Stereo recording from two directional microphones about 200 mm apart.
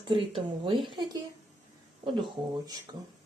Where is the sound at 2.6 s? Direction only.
20° right (ahead or behind).